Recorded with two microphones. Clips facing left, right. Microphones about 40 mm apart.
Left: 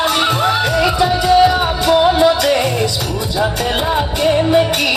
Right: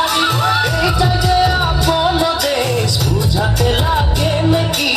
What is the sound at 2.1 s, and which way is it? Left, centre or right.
Music, left.